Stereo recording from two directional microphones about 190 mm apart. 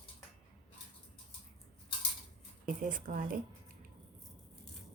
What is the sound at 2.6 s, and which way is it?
Speech, 45° right (ahead or behind).